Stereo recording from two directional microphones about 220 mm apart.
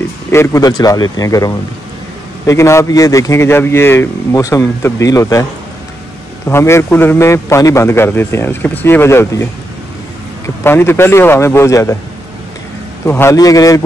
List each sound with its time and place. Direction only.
0.3 s a man's voice: 10° left (ahead or behind)
10.6 s a man's voice: 10° left (ahead or behind)
13.0 s a man's voice: 10° left (ahead or behind)